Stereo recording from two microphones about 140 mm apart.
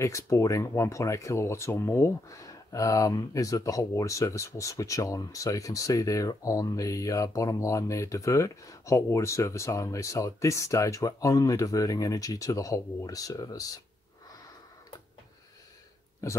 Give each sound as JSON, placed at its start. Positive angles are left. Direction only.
{"t": 0.0, "sound": "speech", "side_deg": 20}
{"t": 16.2, "sound": "speech", "side_deg": 20}